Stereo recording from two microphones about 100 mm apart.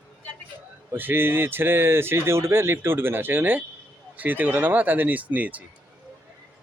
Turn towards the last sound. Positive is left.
turn(degrees=-15)  # may be behind; listen again after turning